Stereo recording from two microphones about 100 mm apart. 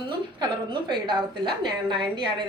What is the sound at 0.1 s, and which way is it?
A woman's voice, 50° right (ahead or behind).